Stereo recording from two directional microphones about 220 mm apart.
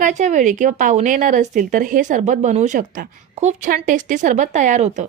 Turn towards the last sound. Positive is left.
turn(degrees=-35)  # may be behind; listen again after turning